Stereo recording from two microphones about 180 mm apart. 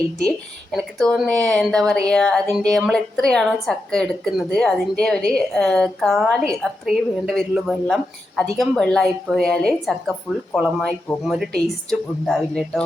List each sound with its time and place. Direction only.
0.3 s speech: 5° left (ahead or behind)